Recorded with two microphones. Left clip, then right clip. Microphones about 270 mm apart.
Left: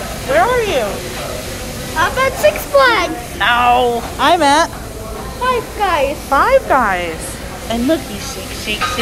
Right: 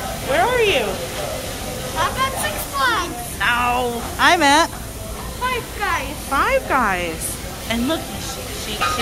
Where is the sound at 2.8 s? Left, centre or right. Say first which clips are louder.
Left 5 dB; centre.